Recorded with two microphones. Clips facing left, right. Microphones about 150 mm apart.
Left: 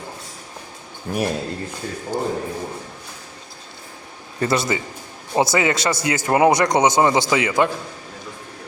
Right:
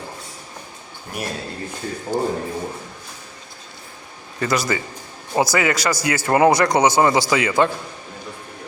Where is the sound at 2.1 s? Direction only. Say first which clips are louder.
Right 2 dB; 15° left (ahead or behind).